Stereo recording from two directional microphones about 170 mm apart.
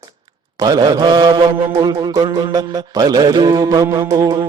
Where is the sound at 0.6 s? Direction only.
25° right (ahead or behind).